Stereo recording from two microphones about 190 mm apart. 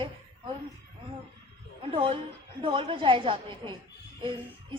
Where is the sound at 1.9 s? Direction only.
30° right (ahead or behind).